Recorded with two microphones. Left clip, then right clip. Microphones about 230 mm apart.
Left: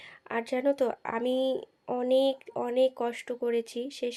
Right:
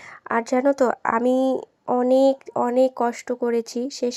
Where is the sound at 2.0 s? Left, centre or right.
Right.